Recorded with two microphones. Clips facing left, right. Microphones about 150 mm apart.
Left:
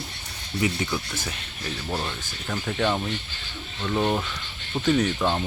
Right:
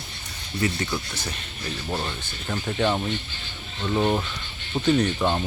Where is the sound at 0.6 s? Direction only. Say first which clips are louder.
Even; 10° left (ahead or behind).